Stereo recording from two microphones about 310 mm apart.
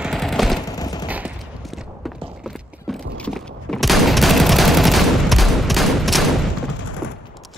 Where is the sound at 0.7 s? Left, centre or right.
Centre.